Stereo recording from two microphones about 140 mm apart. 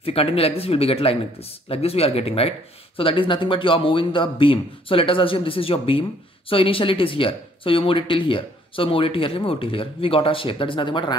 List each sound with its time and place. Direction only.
0.0 s speech: 45° left (ahead or behind)